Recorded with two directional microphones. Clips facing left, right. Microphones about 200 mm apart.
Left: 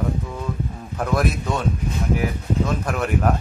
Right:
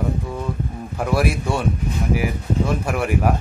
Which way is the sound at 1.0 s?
10° right (ahead or behind).